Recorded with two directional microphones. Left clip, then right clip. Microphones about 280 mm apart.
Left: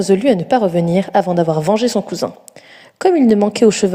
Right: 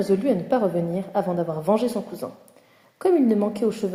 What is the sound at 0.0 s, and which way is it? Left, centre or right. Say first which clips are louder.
A woman's voice: left 8 dB; left.